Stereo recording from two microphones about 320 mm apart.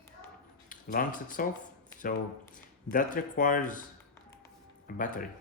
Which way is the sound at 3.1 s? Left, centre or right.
Left.